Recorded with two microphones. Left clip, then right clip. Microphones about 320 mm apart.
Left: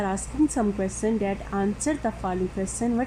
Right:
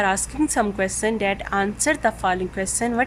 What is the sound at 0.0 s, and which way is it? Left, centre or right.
A woman's voice, right.